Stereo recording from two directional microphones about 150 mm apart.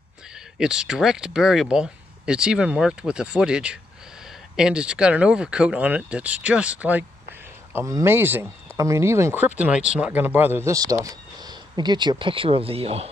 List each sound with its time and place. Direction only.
0.6 s speech: 5° right (ahead or behind); by 13.1 s 40° right (ahead or behind)